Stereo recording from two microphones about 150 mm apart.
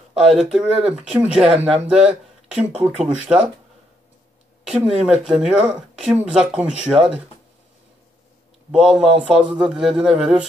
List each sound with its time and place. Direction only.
0.1 s speech: 5° right (ahead or behind)
5.0 s speech: 5° right (ahead or behind)
8.7 s speech: 5° right (ahead or behind)